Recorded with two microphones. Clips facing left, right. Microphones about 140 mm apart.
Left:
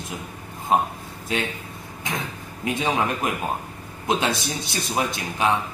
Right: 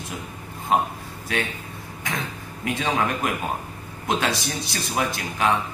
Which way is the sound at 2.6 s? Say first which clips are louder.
Left 1 dB; 20° left (ahead or behind).